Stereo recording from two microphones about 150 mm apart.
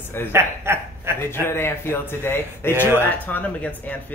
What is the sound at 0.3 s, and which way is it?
Speech, 15° right (ahead or behind).